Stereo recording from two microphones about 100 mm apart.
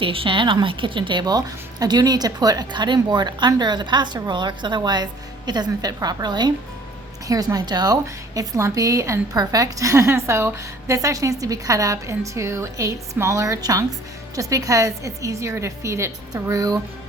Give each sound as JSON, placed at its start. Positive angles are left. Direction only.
{"t": 0.0, "sound": "a woman's voice", "side_deg": -60}